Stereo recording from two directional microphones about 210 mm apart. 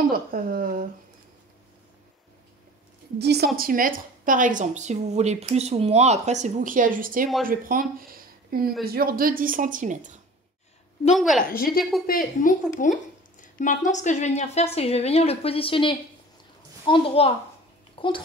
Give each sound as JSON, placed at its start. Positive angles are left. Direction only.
{"t": 0.3, "sound": "speech", "side_deg": -45}
{"t": 3.2, "sound": "a woman's voice", "side_deg": -50}
{"t": 11.1, "sound": "a woman's voice", "side_deg": 0}
{"t": 11.4, "sound": "a woman's voice", "side_deg": 45}